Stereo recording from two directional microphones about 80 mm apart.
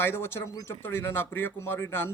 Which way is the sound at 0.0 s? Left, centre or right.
Left.